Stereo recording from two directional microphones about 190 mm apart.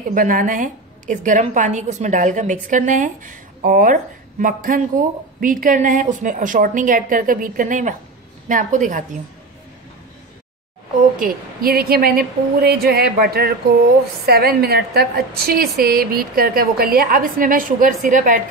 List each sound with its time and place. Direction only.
0.1 s a woman's voice: 45° right (ahead or behind)
11.1 s a woman's voice: 50° right (ahead or behind)